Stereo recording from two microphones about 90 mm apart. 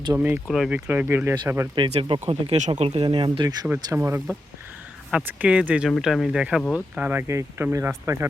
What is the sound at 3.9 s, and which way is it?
Speech, 30° right (ahead or behind).